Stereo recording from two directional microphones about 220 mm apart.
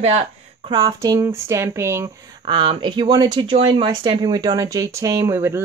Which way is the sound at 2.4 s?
20° right (ahead or behind).